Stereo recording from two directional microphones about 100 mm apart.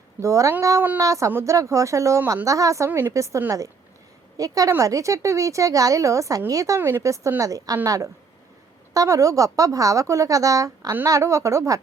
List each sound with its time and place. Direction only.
0.2 s a woman's voice: 30° right (ahead or behind)